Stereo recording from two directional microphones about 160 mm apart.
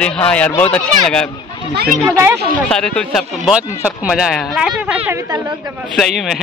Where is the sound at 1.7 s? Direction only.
70° right (ahead or behind).